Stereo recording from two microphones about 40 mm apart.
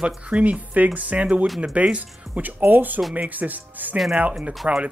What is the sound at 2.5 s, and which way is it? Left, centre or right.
Speech, right.